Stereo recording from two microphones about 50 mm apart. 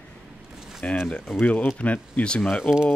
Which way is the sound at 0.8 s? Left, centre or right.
Left.